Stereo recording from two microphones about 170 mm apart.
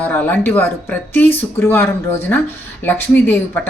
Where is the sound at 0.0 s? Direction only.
10° left (ahead or behind).